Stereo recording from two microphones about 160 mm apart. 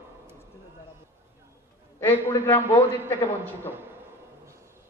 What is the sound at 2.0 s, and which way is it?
Speech, 15° left (ahead or behind).